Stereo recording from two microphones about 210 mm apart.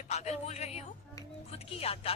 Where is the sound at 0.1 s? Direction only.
30° left (ahead or behind).